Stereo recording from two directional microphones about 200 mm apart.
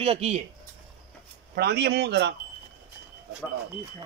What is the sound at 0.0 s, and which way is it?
Speech, 30° right (ahead or behind).